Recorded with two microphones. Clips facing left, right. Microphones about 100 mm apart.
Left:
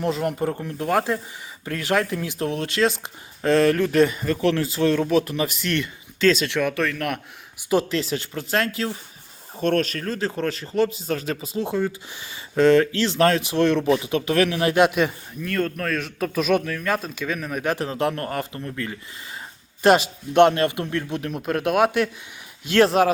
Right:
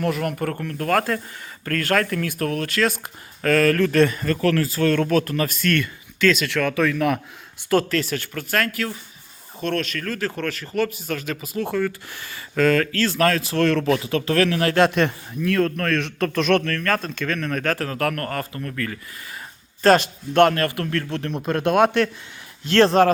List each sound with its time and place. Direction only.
0.0 s speech: 20° left (ahead or behind)
4.9 s speech: 10° left (ahead or behind); by 6.6 s 30° left (ahead or behind)
6.7 s a man's voice: centre (ahead or behind)
7.7 s speech: 15° left (ahead or behind)
9.6 s speech: 40° left (ahead or behind); by 23.0 s 5° left (ahead or behind)